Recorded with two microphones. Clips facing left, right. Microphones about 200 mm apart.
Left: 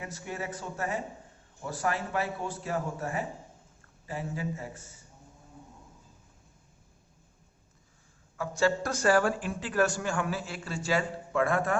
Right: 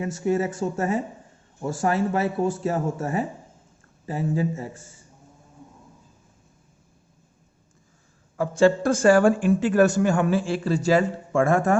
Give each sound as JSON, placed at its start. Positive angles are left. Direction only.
{"t": 0.0, "sound": "speech", "side_deg": -40}
{"t": 8.4, "sound": "a man's voice", "side_deg": -30}